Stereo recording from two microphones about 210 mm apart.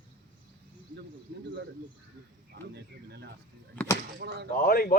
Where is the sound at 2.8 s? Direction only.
55° right (ahead or behind).